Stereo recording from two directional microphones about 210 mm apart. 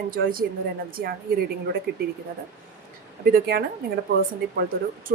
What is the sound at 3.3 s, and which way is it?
Speech, 45° right (ahead or behind).